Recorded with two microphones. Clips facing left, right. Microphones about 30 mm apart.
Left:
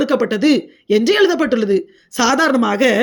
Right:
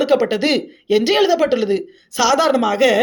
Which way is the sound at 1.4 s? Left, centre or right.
Centre.